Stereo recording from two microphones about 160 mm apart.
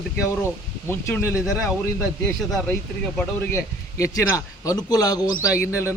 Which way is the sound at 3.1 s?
10° left (ahead or behind).